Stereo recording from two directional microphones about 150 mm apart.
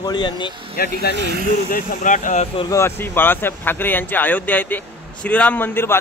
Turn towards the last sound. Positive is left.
turn(degrees=15)  # may be behind; listen again after turning